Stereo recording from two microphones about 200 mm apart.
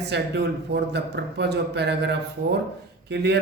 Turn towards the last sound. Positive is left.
turn(degrees=-55)  # may be behind; listen again after turning